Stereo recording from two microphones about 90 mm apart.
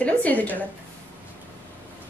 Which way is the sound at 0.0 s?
15° left (ahead or behind).